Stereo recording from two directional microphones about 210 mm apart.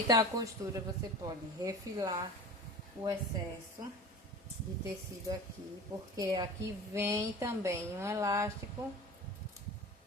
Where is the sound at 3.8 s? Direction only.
20° right (ahead or behind).